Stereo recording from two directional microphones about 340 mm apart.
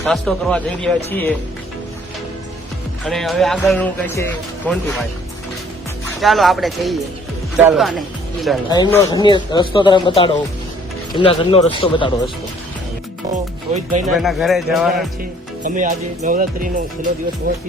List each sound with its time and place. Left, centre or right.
0.0 s speech: centre
3.0 s speech: centre
6.1 s speech: centre
8.7 s a man's voice: centre
13.3 s speech: right
14.2 s speech: centre
15.6 s speech: right